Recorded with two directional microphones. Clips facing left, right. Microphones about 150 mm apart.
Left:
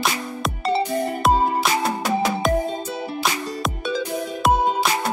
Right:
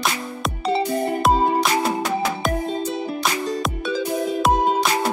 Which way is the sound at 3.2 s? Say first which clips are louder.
Right 1 dB; centre (ahead or behind).